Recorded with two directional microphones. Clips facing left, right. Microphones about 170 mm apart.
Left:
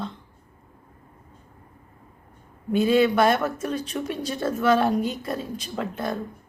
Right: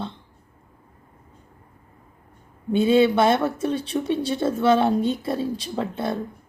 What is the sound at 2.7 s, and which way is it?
Speech, 25° right (ahead or behind).